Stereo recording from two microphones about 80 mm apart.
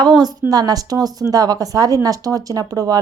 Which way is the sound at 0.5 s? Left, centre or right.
Right.